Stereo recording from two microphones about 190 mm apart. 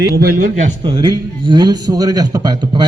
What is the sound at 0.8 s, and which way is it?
A man's voice, 25° right (ahead or behind).